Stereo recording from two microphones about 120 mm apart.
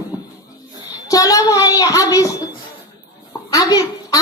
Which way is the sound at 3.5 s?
30° left (ahead or behind).